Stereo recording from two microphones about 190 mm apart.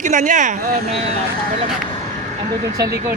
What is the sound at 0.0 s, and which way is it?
Speech, 40° right (ahead or behind).